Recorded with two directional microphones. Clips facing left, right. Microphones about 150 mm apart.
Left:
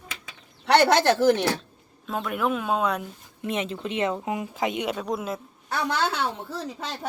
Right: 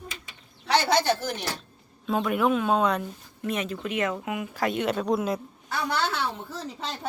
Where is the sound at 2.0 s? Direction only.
Centre (ahead or behind).